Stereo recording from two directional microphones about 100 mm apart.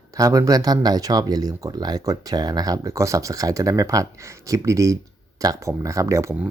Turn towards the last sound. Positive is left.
turn(degrees=-30)  # may be behind; listen again after turning